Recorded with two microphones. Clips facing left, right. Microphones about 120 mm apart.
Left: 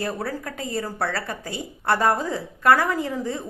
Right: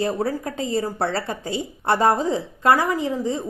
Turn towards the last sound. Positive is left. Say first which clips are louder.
# right 3 dB
turn(degrees=-20)  # may be behind; listen again after turning